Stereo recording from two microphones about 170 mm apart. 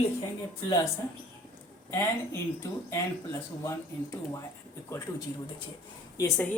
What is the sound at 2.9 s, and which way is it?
Speech, 15° left (ahead or behind).